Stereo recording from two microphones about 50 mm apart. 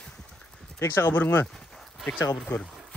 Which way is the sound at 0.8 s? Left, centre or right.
Left.